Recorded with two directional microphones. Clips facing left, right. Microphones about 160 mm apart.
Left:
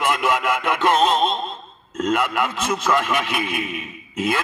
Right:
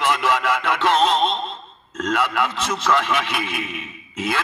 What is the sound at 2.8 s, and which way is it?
A man's voice, 45° left (ahead or behind).